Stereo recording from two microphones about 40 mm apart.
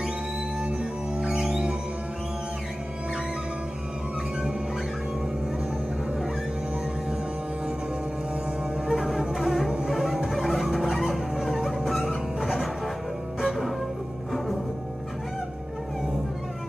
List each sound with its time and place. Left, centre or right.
0.6 s music: right
8.8 s music: centre